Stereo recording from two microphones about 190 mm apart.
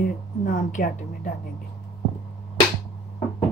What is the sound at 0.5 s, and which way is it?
Speech, 45° left (ahead or behind).